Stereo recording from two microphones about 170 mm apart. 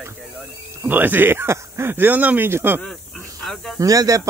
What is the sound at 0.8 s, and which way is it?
Speech, 10° right (ahead or behind).